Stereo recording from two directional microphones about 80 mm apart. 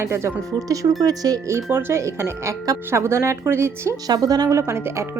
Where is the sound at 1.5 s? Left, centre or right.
Right.